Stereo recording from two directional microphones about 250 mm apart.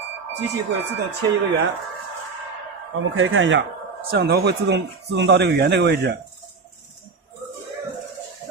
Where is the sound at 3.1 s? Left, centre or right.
Right.